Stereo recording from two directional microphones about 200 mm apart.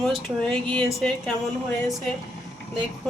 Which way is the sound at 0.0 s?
Centre (ahead or behind).